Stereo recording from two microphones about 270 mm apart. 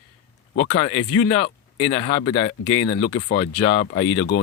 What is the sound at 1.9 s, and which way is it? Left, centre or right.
Speech, centre.